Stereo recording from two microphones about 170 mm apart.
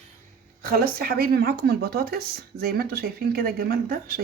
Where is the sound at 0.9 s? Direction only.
60° right (ahead or behind).